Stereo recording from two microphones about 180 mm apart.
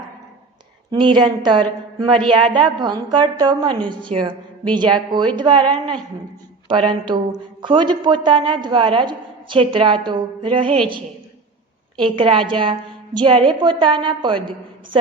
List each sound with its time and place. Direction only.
0.9 s speech: 25° right (ahead or behind)
12.1 s speech: 25° right (ahead or behind)